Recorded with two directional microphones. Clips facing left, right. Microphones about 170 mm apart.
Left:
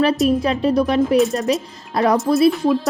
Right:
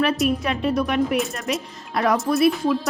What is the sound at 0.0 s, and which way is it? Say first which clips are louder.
Speech: left 5 dB; 35° left (ahead or behind).